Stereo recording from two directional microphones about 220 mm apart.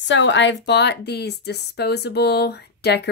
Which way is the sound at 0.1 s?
55° left (ahead or behind).